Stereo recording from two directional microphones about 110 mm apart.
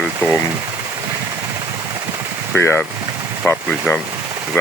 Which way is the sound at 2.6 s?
20° left (ahead or behind).